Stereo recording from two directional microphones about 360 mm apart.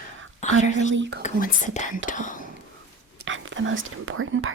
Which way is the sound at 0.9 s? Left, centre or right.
Right.